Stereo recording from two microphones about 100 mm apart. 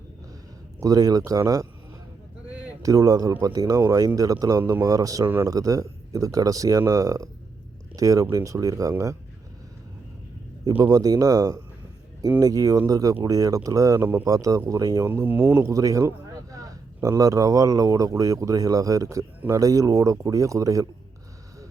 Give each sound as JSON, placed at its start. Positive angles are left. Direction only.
{"t": 0.8, "sound": "a man's voice", "side_deg": -35}
{"t": 2.8, "sound": "a man's voice", "side_deg": -35}
{"t": 5.2, "sound": "a man's voice", "side_deg": -15}
{"t": 5.5, "sound": "a man's voice", "side_deg": -35}
{"t": 10.7, "sound": "a man's voice", "side_deg": -45}
{"t": 15.0, "sound": "speech", "side_deg": -20}
{"t": 15.6, "sound": "a man's voice", "side_deg": -35}